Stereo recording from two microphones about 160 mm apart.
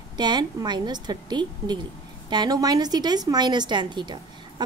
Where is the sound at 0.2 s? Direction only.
25° right (ahead or behind).